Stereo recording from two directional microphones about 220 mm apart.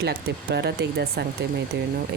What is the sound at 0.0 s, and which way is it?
Speech, 50° right (ahead or behind).